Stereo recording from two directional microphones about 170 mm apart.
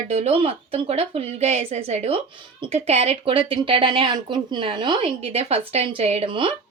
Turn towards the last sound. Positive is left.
turn(degrees=-30)  # may be behind; listen again after turning